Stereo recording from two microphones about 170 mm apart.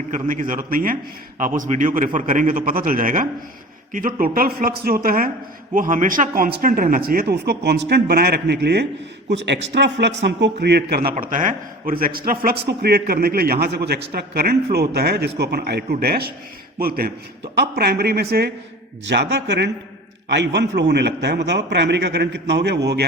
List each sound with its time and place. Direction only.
0.1 s a man's voice: 50° right (ahead or behind); by 8.9 s 75° right (ahead or behind)
9.3 s a man's voice: 90° right; by 11.1 s 65° right (ahead or behind)
11.1 s a man's voice: 50° right (ahead or behind); by 18.5 s 70° right (ahead or behind)
19.0 s a man's voice: 80° right